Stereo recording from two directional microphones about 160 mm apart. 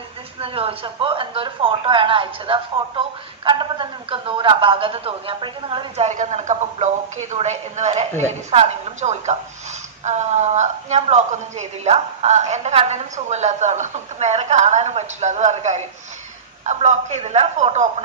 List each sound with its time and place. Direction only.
0.3 s speech: 35° right (ahead or behind)
6.1 s a woman's voice: 50° right (ahead or behind)